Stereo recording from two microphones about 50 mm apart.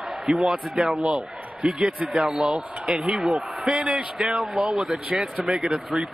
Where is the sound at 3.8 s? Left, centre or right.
Right.